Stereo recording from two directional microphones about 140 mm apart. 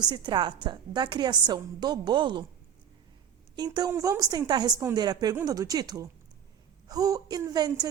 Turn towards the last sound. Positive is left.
turn(degrees=-30)  # may be behind; listen again after turning